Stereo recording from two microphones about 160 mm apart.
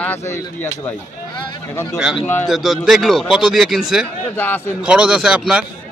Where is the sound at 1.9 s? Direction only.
5° right (ahead or behind).